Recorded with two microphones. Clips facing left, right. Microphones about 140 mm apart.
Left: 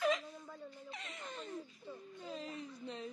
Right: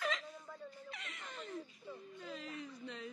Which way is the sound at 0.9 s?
25° left (ahead or behind).